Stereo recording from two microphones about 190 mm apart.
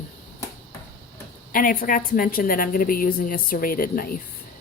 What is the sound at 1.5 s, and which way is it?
A woman's voice, 45° left (ahead or behind).